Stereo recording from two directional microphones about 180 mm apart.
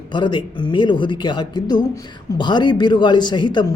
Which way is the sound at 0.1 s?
25° left (ahead or behind).